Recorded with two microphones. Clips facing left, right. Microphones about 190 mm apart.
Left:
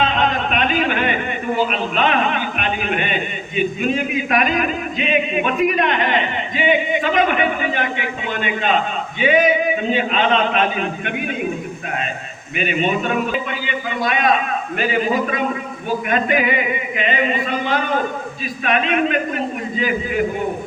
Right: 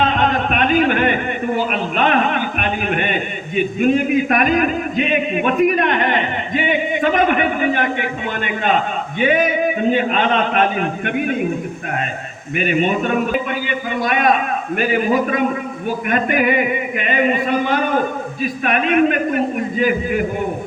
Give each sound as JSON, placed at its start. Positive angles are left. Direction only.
{"t": 0.0, "sound": "a sound", "side_deg": -50}
{"t": 9.1, "sound": "a man's voice", "side_deg": -50}
{"t": 12.5, "sound": "a man's voice", "side_deg": -50}